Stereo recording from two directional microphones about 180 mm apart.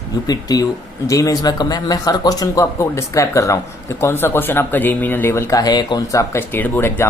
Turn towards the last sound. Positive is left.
turn(degrees=10)  # may be behind; listen again after turning